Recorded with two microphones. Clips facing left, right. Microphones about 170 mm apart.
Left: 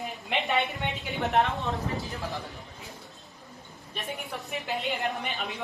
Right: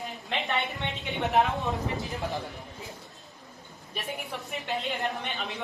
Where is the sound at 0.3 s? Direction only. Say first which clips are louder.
Left 3 dB; 20° left (ahead or behind).